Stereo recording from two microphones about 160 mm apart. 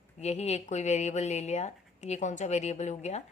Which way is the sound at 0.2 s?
40° left (ahead or behind).